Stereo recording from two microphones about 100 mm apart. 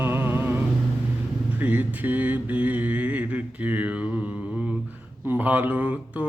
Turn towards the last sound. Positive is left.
turn(degrees=-15)  # may be behind; listen again after turning